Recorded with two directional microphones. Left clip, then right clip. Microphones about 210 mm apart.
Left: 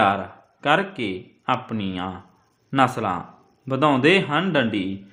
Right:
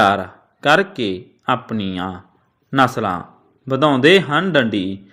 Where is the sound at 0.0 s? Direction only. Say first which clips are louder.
Right 5 dB; 20° right (ahead or behind).